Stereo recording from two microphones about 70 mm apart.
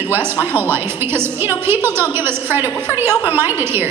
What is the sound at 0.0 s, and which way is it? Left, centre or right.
A woman's voice, right.